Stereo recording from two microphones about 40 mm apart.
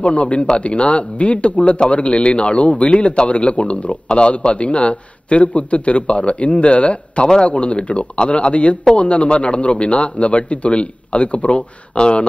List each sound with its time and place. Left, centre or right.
0.0 s a man's voice: left